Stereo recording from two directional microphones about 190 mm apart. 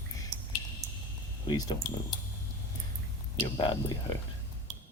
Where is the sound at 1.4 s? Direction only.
20° left (ahead or behind).